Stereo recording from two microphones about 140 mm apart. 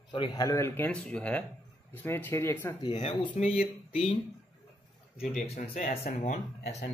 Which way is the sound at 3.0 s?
40° left (ahead or behind).